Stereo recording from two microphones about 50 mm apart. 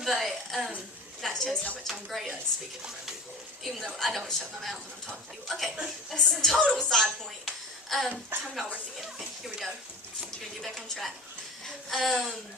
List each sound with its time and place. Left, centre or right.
0.0 s a sound: centre
1.2 s a woman's voice: centre
3.6 s a woman's voice: centre
7.4 s a sound: centre
8.3 s a woman's voice: right
9.0 s a woman's voice: centre